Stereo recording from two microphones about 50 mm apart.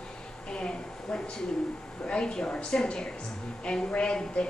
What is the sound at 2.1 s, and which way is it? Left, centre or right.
A woman's voice, centre.